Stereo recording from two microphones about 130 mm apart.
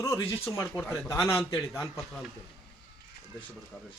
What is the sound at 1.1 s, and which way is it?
Speech, 20° left (ahead or behind).